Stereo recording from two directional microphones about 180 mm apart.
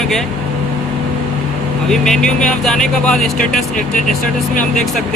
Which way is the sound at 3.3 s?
45° left (ahead or behind).